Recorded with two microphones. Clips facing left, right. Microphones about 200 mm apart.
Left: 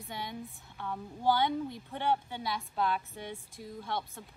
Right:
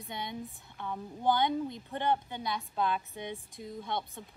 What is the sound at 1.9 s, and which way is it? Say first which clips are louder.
Speech: even; 10° left (ahead or behind).